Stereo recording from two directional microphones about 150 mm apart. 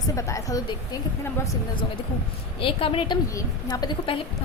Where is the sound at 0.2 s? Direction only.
20° left (ahead or behind).